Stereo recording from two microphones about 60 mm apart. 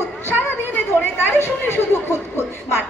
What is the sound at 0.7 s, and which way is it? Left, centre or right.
Speech, left.